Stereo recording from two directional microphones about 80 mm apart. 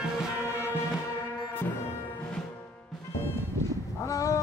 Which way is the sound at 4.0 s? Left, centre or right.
Left.